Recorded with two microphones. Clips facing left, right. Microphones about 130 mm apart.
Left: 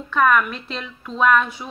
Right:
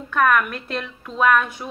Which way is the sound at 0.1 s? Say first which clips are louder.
Left 1 dB; 55° right (ahead or behind).